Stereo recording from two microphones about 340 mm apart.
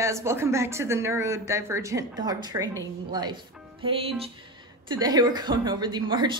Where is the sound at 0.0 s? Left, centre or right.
Centre.